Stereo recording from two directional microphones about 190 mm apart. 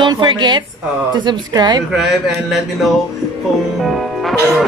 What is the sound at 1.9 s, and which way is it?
Speech, centre (ahead or behind).